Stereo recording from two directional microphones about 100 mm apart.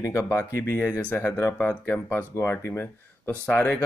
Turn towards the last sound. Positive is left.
turn(degrees=20)  # may be behind; listen again after turning